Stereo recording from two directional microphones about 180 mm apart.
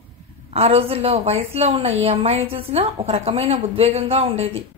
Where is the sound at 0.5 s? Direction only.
35° right (ahead or behind).